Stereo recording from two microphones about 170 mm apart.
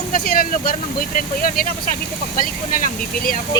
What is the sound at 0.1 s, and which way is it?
Speech, 60° left (ahead or behind).